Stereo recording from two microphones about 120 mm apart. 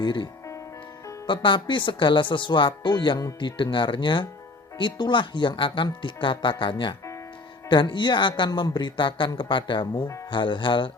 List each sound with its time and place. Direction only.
0.0 s speech: 40° left (ahead or behind)
1.3 s speech: 40° left (ahead or behind)